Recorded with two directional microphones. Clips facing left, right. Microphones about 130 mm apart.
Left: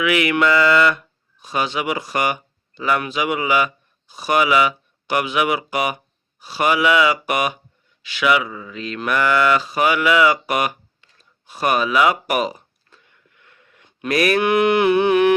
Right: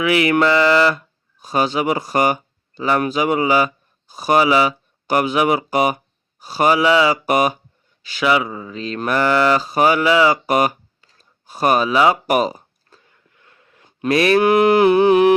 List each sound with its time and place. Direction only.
0.0 s speech: 35° right (ahead or behind)
4.1 s mantra: 40° right (ahead or behind)
10.4 s a sound: 35° right (ahead or behind)